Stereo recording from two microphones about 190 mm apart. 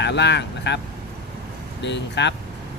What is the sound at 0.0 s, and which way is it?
Speech, 65° left (ahead or behind).